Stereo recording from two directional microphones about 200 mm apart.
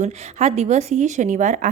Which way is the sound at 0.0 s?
35° right (ahead or behind).